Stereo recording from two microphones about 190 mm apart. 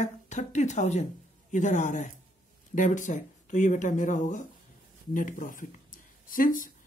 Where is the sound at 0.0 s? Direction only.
40° left (ahead or behind).